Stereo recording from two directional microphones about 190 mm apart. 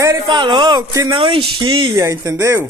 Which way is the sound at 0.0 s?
20° right (ahead or behind).